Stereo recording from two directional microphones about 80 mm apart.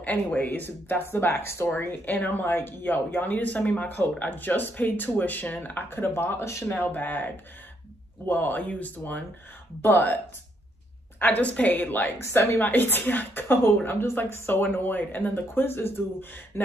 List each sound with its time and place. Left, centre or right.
0.0 s speech: centre
8.3 s speech: left
11.1 s speech: left